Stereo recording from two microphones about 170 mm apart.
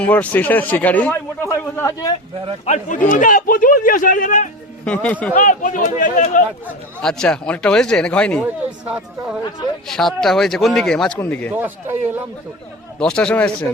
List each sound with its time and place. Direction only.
0.0 s speech: 10° left (ahead or behind)
2.6 s speech: 45° left (ahead or behind)
7.0 s a man's voice: 5° left (ahead or behind)
8.4 s a man's voice: 10° right (ahead or behind); by 11.5 s 10° left (ahead or behind)
11.5 s speech: 10° right (ahead or behind)
13.0 s a man's voice: 5° left (ahead or behind)